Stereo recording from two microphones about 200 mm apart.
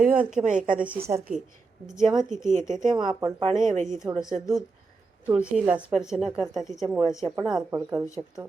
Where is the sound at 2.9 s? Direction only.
20° right (ahead or behind).